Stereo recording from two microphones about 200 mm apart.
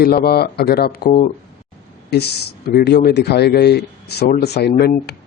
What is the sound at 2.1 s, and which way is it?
Speech, 55° left (ahead or behind).